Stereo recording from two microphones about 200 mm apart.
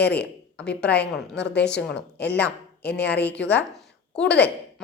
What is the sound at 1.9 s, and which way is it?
Speech, 55° left (ahead or behind).